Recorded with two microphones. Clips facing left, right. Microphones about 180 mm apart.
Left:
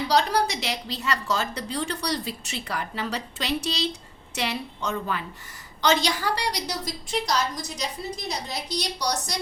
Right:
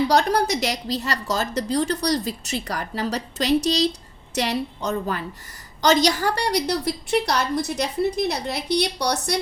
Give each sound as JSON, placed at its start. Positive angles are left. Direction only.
{"t": 0.1, "sound": "a woman's voice", "side_deg": -50}